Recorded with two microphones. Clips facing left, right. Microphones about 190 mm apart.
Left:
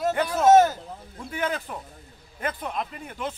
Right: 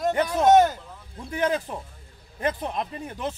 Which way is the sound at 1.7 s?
25° right (ahead or behind).